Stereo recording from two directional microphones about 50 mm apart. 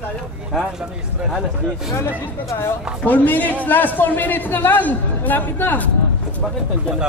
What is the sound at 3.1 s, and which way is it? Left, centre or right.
A man's voice, left.